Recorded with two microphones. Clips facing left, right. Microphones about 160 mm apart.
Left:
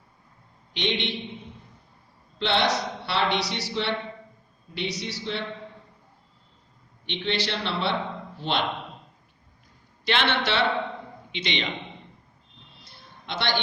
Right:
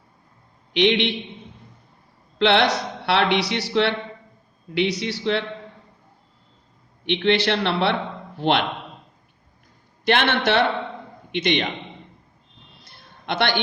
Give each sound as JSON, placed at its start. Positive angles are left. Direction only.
{"t": 0.7, "sound": "a man's voice", "side_deg": -65}
{"t": 2.4, "sound": "a man's voice", "side_deg": -65}
{"t": 7.0, "sound": "a man's voice", "side_deg": -65}
{"t": 10.1, "sound": "a man's voice", "side_deg": -50}
{"t": 12.8, "sound": "a sound", "side_deg": -55}